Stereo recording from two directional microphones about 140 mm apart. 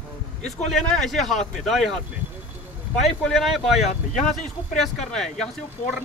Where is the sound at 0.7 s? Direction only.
Centre (ahead or behind).